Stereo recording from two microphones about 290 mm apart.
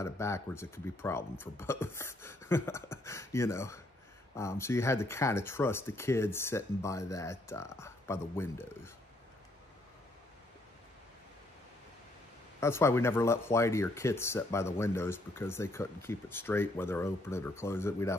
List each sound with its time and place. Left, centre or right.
0.0 s speech: centre
12.5 s speech: centre